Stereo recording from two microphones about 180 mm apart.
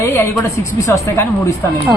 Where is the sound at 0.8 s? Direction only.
15° left (ahead or behind).